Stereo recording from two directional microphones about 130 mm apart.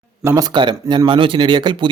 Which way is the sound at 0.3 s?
30° right (ahead or behind).